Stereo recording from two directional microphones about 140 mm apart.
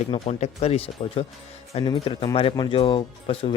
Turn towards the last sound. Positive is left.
turn(degrees=40)  # may be behind; listen again after turning